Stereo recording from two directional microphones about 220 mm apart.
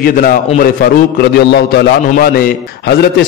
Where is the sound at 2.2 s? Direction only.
45° left (ahead or behind).